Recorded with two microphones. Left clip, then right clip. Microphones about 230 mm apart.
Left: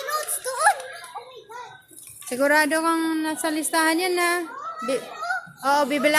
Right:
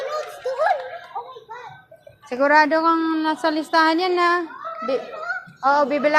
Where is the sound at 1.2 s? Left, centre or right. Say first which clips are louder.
Right 8 dB; centre.